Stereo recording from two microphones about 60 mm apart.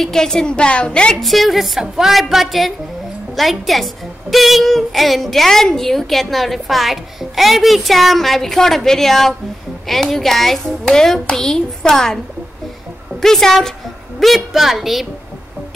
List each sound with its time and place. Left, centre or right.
0.0 s a woman's voice: centre
1.2 s a woman's voice: centre
13.2 s a woman's voice: centre